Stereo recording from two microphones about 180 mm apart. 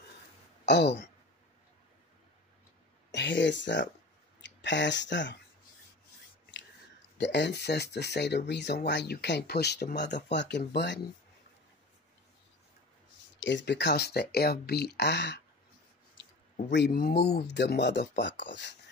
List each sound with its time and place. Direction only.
0.7 s speech: 70° left (ahead or behind)
3.1 s speech: 75° left (ahead or behind)
7.2 s speech: 75° left (ahead or behind)
10.7 s speech: 70° left (ahead or behind)
13.4 s speech: 80° left
16.7 s speech: 60° left (ahead or behind); by 18.8 s 80° left